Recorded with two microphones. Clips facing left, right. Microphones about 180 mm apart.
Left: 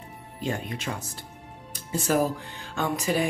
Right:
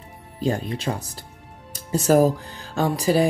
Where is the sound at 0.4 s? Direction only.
35° right (ahead or behind).